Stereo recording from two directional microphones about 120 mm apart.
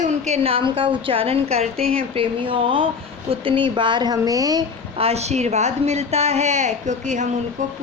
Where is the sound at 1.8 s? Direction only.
10° left (ahead or behind).